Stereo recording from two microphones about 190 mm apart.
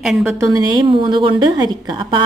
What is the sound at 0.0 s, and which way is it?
Speech, centre (ahead or behind).